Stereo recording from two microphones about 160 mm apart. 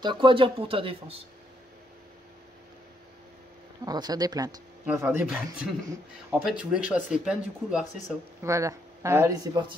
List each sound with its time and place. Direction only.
0.0 s speech: 30° right (ahead or behind)
3.8 s speech: 25° right (ahead or behind)
4.8 s speech: 15° right (ahead or behind)
8.4 s speech: 20° right (ahead or behind)